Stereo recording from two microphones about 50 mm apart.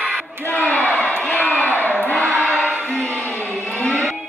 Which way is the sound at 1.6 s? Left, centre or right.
Left.